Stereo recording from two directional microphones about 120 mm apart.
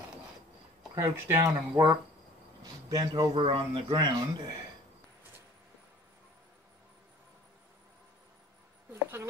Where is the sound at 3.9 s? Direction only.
35° right (ahead or behind).